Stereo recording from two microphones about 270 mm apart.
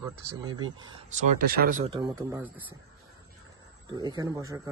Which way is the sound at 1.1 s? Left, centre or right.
Right.